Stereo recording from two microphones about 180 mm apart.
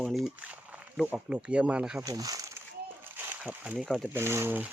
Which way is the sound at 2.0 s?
20° right (ahead or behind).